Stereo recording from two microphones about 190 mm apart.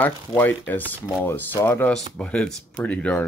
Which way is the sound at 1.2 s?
10° left (ahead or behind).